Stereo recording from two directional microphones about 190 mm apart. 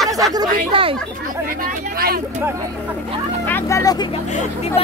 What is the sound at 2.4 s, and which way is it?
Speech, 15° right (ahead or behind).